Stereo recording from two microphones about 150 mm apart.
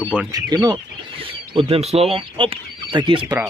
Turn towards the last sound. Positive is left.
turn(degrees=-35)  # may be behind; listen again after turning